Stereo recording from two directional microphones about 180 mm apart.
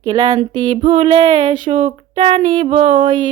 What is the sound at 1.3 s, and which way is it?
Mantra, 40° right (ahead or behind).